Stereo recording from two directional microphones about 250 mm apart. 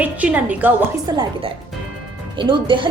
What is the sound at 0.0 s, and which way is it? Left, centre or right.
Speech, centre.